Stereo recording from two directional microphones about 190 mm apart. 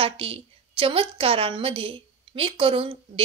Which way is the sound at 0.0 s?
30° right (ahead or behind).